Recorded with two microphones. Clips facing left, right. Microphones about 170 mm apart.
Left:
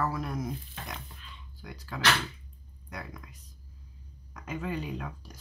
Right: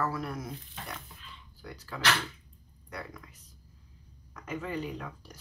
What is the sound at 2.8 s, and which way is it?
Speech, 10° left (ahead or behind).